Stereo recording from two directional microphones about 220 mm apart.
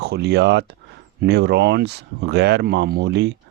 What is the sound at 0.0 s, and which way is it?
Speech, 50° right (ahead or behind).